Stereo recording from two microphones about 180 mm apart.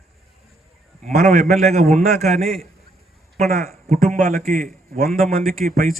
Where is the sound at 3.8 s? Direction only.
45° right (ahead or behind).